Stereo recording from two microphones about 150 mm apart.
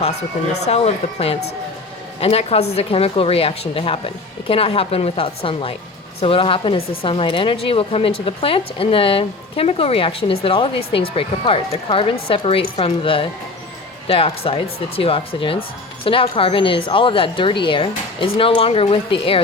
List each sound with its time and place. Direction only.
0.7 s speech: 45° left (ahead or behind)